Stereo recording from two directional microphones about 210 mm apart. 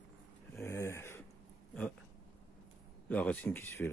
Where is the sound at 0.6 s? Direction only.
15° left (ahead or behind).